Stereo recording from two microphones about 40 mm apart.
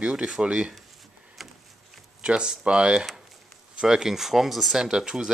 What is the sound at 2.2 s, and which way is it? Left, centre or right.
Speech, right.